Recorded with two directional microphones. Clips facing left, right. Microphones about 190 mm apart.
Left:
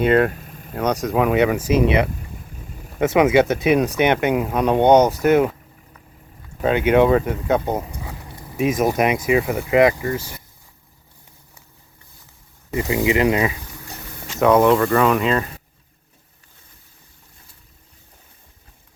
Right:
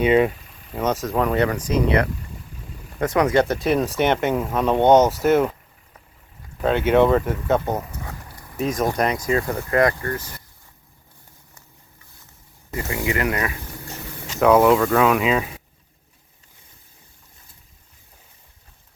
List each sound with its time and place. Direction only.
0.0 s speech: centre (ahead or behind)
0.3 s a sound: 50° left (ahead or behind)
0.9 s speech: centre (ahead or behind)
3.2 s speech: 5° left (ahead or behind)
4.0 s speech: 15° left (ahead or behind)
5.2 s speech: centre (ahead or behind)
6.6 s speech: 10° left (ahead or behind)
7.6 s speech: 20° left (ahead or behind)
8.3 s a sound: 25° left (ahead or behind)
8.6 s speech: 5° left (ahead or behind)
12.7 s speech: 20° left (ahead or behind)
14.3 s speech: centre (ahead or behind)